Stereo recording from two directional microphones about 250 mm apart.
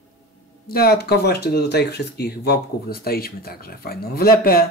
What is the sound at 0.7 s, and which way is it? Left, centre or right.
Speech, left.